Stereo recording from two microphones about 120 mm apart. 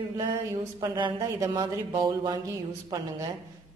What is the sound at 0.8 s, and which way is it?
Speech, 40° right (ahead or behind).